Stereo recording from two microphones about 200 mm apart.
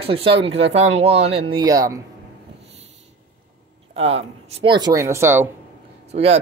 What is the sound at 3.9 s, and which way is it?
Speech, 30° right (ahead or behind).